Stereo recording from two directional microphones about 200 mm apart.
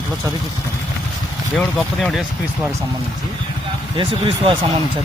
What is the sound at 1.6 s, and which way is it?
Speech, centre (ahead or behind).